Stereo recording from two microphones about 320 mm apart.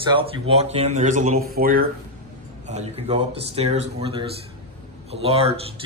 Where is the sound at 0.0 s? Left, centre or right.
Centre.